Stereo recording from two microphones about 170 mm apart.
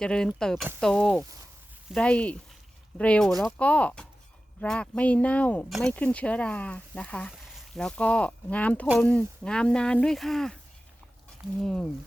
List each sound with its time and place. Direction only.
0.0 s speech: 5° left (ahead or behind)
11.6 s speech: 5° left (ahead or behind)